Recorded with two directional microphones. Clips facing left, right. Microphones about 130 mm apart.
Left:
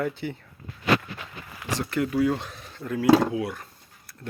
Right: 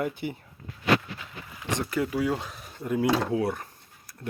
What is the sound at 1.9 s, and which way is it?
Speech, 10° right (ahead or behind).